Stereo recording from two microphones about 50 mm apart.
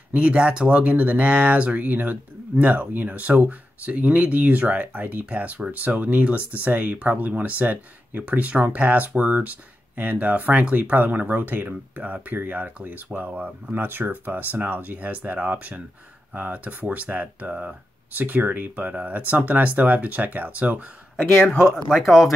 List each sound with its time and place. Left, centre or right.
0.1 s speech: right
22.0 s speech: centre